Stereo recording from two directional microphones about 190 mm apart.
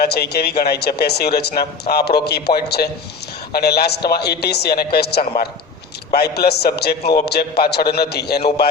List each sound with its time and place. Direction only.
0.0 s a man's voice: 55° left (ahead or behind)